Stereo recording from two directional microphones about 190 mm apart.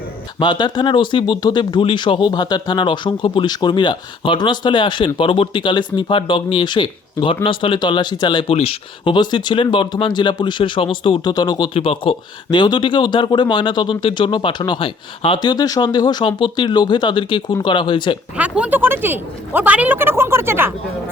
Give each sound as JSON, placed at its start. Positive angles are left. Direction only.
{"t": 0.3, "sound": "speech", "side_deg": 25}
{"t": 18.3, "sound": "speech", "side_deg": -5}